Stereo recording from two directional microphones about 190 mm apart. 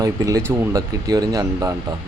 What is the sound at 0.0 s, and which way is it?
Speech, 15° right (ahead or behind).